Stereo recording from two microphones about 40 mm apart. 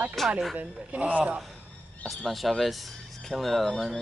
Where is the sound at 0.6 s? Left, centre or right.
Right.